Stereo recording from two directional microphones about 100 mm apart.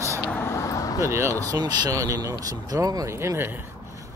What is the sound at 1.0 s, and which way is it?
Speech, 25° right (ahead or behind).